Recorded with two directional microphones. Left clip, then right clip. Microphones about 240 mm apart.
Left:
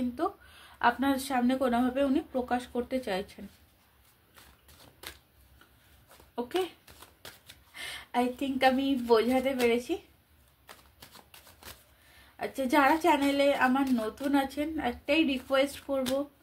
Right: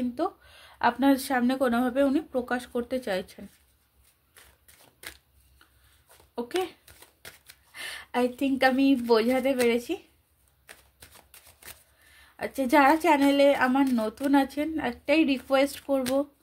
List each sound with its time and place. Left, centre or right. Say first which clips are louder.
0.1 s a woman's voice: right 2 dB; right
7.2 s a sound: right 2 dB; right
7.7 s a woman's voice: right 1 dB; right
10.7 s shuffling cards: even; right
12.4 s a woman's voice: right 4 dB; right